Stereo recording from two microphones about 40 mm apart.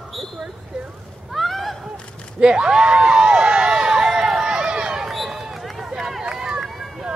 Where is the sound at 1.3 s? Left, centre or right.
Centre.